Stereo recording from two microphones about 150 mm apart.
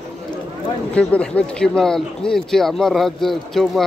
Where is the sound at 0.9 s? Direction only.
10° left (ahead or behind).